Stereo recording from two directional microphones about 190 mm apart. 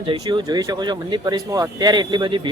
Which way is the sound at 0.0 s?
25° right (ahead or behind).